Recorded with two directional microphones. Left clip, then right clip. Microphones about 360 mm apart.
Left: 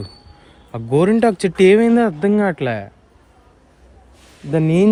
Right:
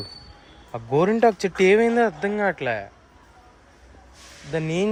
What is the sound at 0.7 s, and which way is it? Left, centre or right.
Speech, left.